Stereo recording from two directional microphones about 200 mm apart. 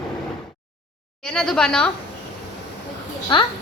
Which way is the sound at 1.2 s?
5° left (ahead or behind).